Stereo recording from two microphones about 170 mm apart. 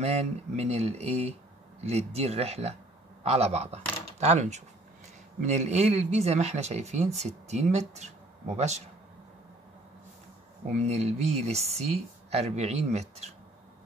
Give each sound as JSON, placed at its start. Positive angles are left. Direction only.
{"t": 0.0, "sound": "speech", "side_deg": -40}
{"t": 10.7, "sound": "speech", "side_deg": -40}